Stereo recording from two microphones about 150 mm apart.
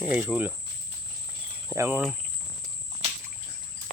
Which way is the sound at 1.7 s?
15° right (ahead or behind).